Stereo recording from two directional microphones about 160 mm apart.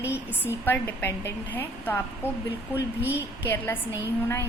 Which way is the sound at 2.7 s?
10° right (ahead or behind).